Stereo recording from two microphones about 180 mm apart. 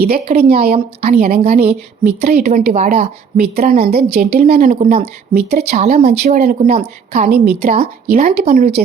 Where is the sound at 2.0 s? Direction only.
60° right (ahead or behind).